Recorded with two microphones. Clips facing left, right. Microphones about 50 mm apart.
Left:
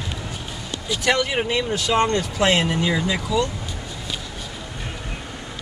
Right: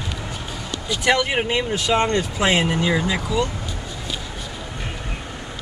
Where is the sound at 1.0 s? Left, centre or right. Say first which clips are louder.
Right 2 dB; right.